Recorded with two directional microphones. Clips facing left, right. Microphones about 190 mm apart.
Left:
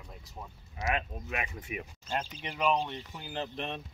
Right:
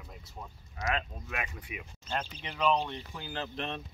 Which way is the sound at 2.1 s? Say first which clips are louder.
Even; 10° left (ahead or behind).